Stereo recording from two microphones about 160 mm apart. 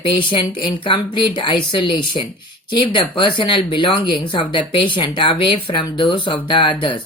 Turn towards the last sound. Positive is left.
turn(degrees=30)  # may be behind; listen again after turning